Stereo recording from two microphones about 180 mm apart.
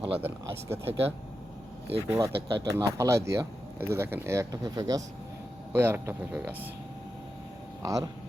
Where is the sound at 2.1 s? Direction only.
20° right (ahead or behind).